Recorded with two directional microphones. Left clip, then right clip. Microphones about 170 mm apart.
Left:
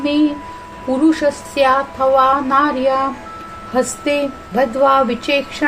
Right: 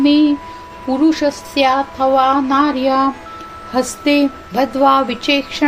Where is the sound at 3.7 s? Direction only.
30° right (ahead or behind).